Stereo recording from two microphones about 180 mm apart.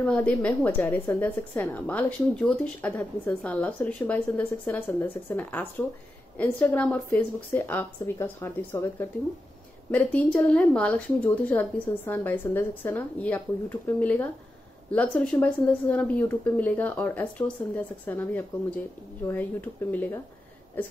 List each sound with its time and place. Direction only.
0.0 s a woman's voice: 5° left (ahead or behind)
9.8 s a woman's voice: 5° left (ahead or behind)